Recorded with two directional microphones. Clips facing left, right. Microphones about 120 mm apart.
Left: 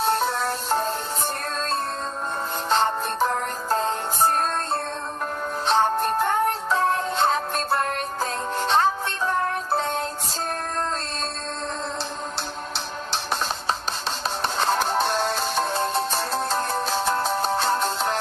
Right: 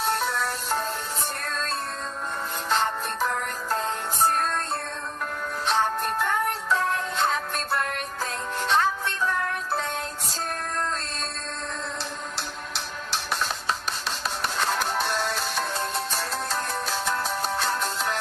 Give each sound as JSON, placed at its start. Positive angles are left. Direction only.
{"t": 0.0, "sound": "music", "side_deg": 30}
{"t": 2.7, "sound": "music", "side_deg": 30}
{"t": 5.7, "sound": "music", "side_deg": 30}
{"t": 14.4, "sound": "music", "side_deg": 30}